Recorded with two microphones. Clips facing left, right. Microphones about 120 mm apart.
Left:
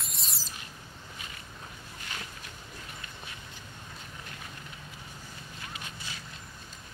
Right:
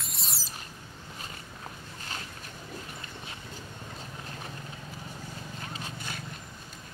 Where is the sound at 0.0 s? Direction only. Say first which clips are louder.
Right 2 dB; centre (ahead or behind).